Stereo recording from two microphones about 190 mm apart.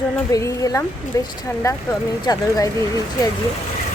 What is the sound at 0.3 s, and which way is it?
Speech, 15° left (ahead or behind).